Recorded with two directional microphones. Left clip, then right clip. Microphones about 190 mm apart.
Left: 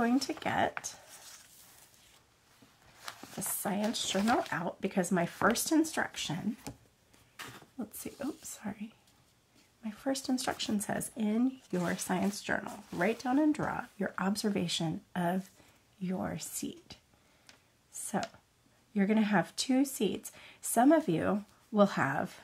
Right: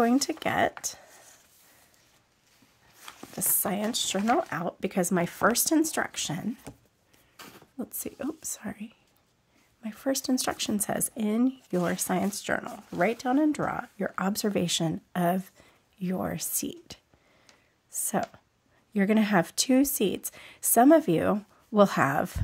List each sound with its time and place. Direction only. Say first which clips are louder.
0.0 s speech: right 6 dB; 50° right (ahead or behind)
3.3 s speech: right 5 dB; 50° right (ahead or behind)
7.7 s speech: right 9 dB; 45° right (ahead or behind)
17.5 s a sound: right 8 dB; 50° right (ahead or behind)
18.9 s speech: right 5 dB; 50° right (ahead or behind)